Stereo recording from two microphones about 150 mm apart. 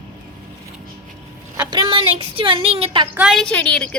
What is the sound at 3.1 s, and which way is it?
Speech, 5° right (ahead or behind).